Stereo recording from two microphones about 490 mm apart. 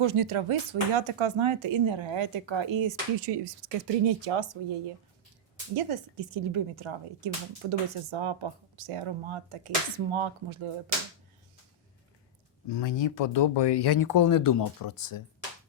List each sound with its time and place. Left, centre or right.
0.0 s speech: right
3.2 s speech: right
5.7 s speech: right
12.6 s speech: left